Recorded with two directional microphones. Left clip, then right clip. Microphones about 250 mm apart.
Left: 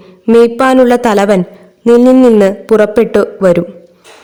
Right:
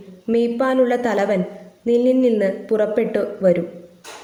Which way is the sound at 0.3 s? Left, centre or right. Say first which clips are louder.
Left 12 dB; left.